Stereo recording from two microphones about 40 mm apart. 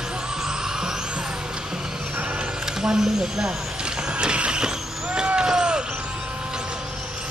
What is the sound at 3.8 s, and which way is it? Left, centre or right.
Mechanisms, right.